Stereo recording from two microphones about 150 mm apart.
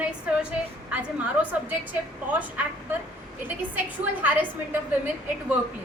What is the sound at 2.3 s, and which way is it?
Speech, 10° right (ahead or behind).